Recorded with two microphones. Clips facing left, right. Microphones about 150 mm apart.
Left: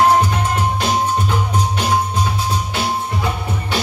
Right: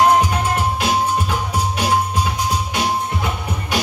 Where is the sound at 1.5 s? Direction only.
10° right (ahead or behind).